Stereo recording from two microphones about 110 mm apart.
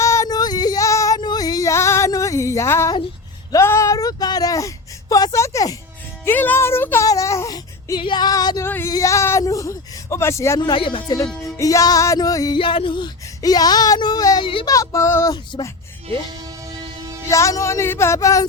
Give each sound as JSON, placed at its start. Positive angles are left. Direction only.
{"t": 0.0, "sound": "female singing", "side_deg": 30}
{"t": 3.5, "sound": "speech", "side_deg": 25}
{"t": 6.2, "sound": "speech", "side_deg": 15}
{"t": 7.0, "sound": "a sound", "side_deg": 30}
{"t": 7.9, "sound": "speech", "side_deg": 45}
{"t": 8.6, "sound": "speech", "side_deg": 20}
{"t": 10.7, "sound": "speech", "side_deg": 50}
{"t": 11.5, "sound": "speech", "side_deg": 30}
{"t": 12.5, "sound": "speech", "side_deg": 55}
{"t": 14.4, "sound": "speech", "side_deg": 50}
{"t": 14.7, "sound": "speech", "side_deg": 30}
{"t": 15.5, "sound": "speech", "side_deg": 50}
{"t": 16.6, "sound": "a sound", "side_deg": -35}
{"t": 17.2, "sound": "speech", "side_deg": 30}